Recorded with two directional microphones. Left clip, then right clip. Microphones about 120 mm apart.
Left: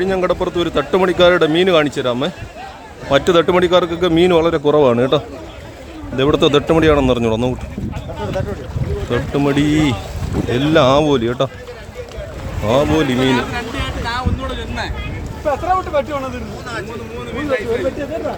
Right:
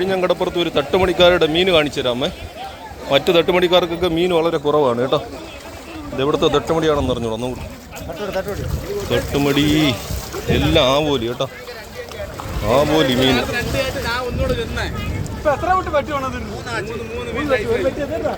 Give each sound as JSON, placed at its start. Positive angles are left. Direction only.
{"t": 0.0, "sound": "a man's voice", "side_deg": 30}
{"t": 4.1, "sound": "a man's voice", "side_deg": 50}
{"t": 9.0, "sound": "speech", "side_deg": 25}
{"t": 10.8, "sound": "a man's voice", "side_deg": 40}
{"t": 12.6, "sound": "a man's voice", "side_deg": 35}
{"t": 15.4, "sound": "speech", "side_deg": -25}
{"t": 17.3, "sound": "speech", "side_deg": 5}